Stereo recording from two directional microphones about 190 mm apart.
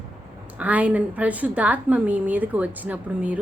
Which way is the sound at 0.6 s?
10° right (ahead or behind).